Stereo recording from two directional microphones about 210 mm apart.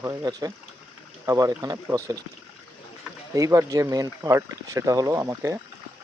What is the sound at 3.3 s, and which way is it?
Speech, 15° right (ahead or behind).